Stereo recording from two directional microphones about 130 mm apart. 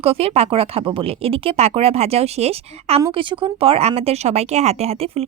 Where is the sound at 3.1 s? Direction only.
40° right (ahead or behind).